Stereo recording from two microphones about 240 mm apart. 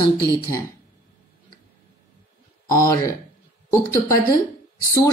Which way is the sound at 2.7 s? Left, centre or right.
Centre.